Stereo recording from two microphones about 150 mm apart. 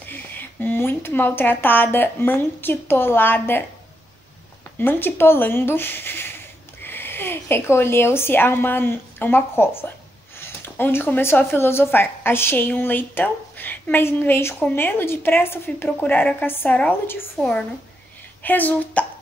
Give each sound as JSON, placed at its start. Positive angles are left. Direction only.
{"t": 0.1, "sound": "a woman's voice", "side_deg": 15}
{"t": 4.7, "sound": "a woman's voice", "side_deg": 15}